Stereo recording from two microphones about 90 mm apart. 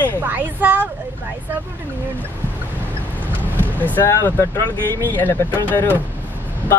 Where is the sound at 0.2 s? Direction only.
20° right (ahead or behind).